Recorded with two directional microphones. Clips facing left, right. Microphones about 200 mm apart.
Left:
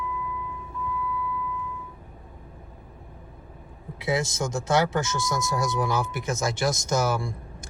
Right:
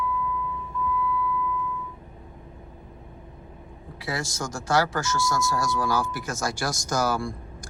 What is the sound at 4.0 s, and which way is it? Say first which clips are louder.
Speech: left 5 dB; 20° left (ahead or behind).